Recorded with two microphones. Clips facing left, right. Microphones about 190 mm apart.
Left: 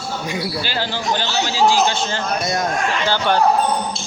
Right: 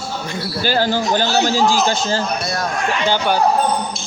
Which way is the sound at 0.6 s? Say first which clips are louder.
Right 6 dB; 45° right (ahead or behind).